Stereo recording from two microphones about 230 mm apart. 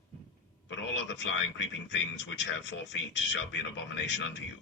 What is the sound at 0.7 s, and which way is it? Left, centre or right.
Speech, left.